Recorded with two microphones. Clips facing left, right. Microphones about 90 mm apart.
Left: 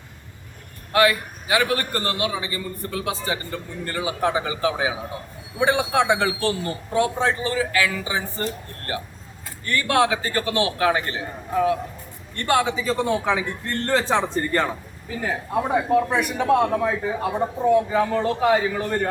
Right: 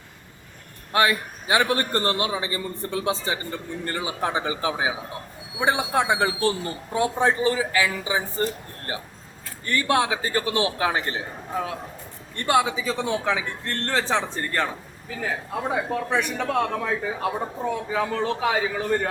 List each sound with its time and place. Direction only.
0.9 s a man's voice: 25° right (ahead or behind)
9.6 s a man's voice: 25° right (ahead or behind)
12.5 s a man's voice: 10° right (ahead or behind)
15.9 s a man's voice: 5° left (ahead or behind)